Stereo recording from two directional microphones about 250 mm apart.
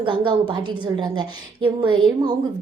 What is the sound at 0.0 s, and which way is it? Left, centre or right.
A woman's voice, centre.